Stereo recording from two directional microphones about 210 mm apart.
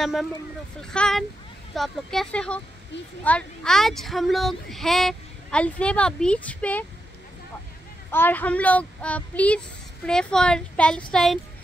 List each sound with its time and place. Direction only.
0.0 s speech: centre (ahead or behind)
8.1 s speech: 10° left (ahead or behind)